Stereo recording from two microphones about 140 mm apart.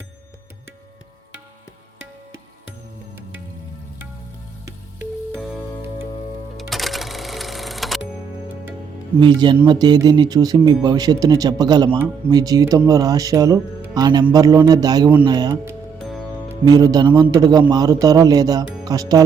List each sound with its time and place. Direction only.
6.6 s music: centre (ahead or behind)
9.2 s speech: 35° right (ahead or behind)